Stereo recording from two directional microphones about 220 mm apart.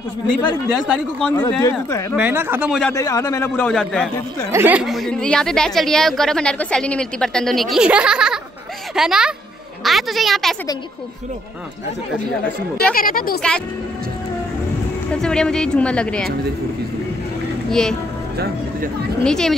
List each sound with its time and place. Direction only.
0.7 s a woman's voice: centre (ahead or behind)
1.3 s a man's voice: 10° left (ahead or behind)
2.1 s speech: 10° right (ahead or behind)
2.8 s a man's voice: 15° left (ahead or behind)
4.5 s a woman's voice: 10° right (ahead or behind)
12.9 s speech: 40° left (ahead or behind)
15.1 s a woman's voice: 5° left (ahead or behind)
17.6 s speech: centre (ahead or behind)
19.2 s a woman's voice: 5° left (ahead or behind)